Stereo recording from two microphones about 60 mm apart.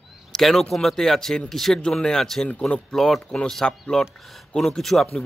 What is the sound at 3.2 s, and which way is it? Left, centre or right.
Speech, centre.